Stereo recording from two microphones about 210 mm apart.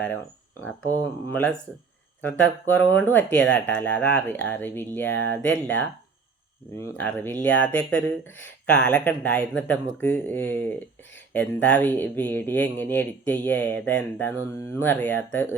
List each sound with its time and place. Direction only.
1.3 s speech: 5° left (ahead or behind)
6.9 s speech: 10° left (ahead or behind)